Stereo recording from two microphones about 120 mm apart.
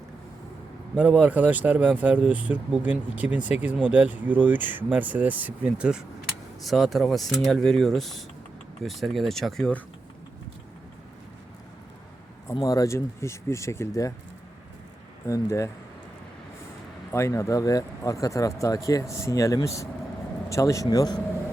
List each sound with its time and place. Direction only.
0.9 s speech: 10° right (ahead or behind); by 9.8 s 5° left (ahead or behind)
12.6 s speech: 30° left (ahead or behind)
15.3 s speech: 25° left (ahead or behind)
17.1 s speech: 25° left (ahead or behind)